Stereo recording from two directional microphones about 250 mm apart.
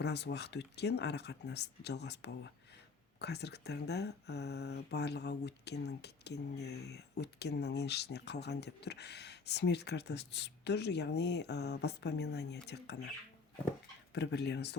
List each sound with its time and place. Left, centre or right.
0.0 s speech: left